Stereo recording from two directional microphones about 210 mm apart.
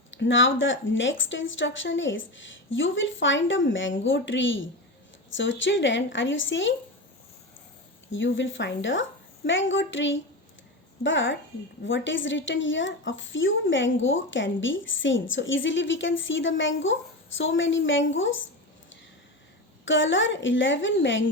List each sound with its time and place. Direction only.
0.1 s a woman's voice: 65° left (ahead or behind)
8.1 s a woman's voice: 60° left (ahead or behind)
19.8 s a woman's voice: 65° left (ahead or behind)